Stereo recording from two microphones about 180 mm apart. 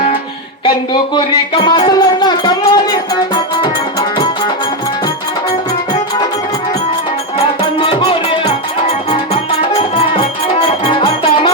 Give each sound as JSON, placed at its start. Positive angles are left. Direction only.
{"t": 1.1, "sound": "music", "side_deg": 25}
{"t": 7.8, "sound": "music", "side_deg": 25}